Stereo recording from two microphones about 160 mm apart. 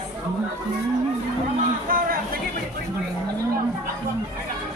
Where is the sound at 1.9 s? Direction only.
65° right (ahead or behind).